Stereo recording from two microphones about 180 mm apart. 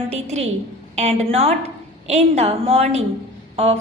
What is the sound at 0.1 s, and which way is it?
A woman's voice, 40° right (ahead or behind).